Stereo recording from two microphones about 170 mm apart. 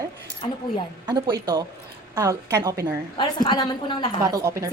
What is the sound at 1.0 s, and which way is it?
A woman's voice, 25° right (ahead or behind).